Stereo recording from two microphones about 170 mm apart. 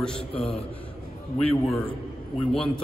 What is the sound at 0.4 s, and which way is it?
Speech, 35° left (ahead or behind).